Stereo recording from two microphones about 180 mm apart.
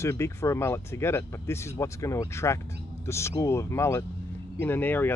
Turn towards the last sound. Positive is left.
turn(degrees=10)  # may be behind; listen again after turning